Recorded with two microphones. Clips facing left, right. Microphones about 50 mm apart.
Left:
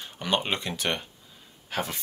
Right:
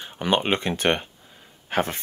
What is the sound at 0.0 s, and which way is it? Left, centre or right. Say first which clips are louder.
Speech: right 5 dB; right.